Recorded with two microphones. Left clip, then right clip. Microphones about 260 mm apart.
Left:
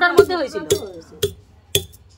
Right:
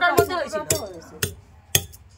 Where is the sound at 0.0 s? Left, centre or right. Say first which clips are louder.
Left 5 dB; left.